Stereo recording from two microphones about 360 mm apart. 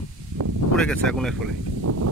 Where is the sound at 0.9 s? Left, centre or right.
Centre.